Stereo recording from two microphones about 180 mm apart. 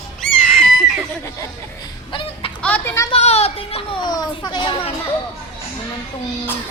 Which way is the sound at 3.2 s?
35° left (ahead or behind).